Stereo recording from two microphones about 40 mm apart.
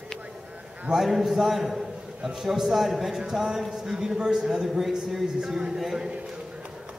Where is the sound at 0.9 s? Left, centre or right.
Centre.